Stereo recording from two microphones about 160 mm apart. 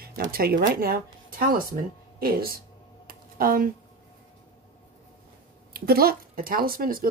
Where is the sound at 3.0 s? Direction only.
65° right (ahead or behind).